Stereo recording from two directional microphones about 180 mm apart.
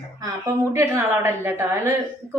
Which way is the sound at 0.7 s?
15° right (ahead or behind).